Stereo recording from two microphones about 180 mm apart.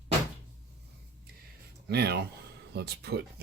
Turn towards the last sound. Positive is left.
turn(degrees=-65)  # may be behind; listen again after turning